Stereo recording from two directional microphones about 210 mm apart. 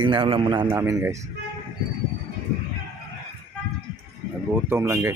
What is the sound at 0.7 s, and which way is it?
Speech, 10° right (ahead or behind).